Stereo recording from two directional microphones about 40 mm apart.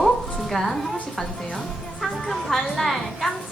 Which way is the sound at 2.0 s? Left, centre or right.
Centre.